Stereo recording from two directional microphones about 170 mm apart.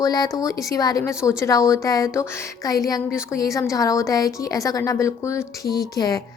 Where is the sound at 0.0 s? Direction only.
20° left (ahead or behind).